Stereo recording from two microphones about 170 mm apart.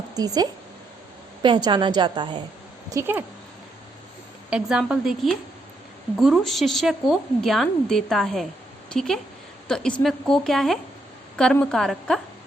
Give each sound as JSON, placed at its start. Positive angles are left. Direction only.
{"t": 0.2, "sound": "a woman's voice", "side_deg": -25}
{"t": 2.9, "sound": "a woman's voice", "side_deg": -10}
{"t": 4.4, "sound": "a woman's voice", "side_deg": -5}